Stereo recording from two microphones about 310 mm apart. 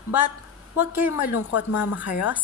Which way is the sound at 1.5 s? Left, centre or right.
Left.